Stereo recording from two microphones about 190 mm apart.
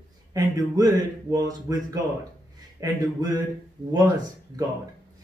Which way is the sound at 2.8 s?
20° right (ahead or behind).